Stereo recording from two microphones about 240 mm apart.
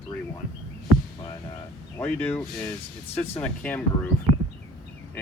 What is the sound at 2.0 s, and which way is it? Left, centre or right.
Speech, centre.